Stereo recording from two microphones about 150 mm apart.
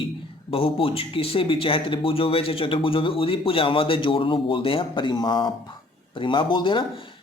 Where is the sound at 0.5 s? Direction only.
40° left (ahead or behind).